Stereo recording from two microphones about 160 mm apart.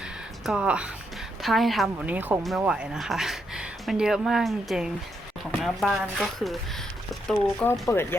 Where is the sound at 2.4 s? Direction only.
Centre (ahead or behind).